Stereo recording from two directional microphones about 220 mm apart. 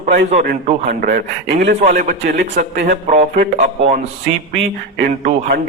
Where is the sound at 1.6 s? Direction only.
50° right (ahead or behind).